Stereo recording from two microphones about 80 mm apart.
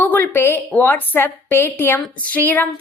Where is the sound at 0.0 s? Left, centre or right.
Left.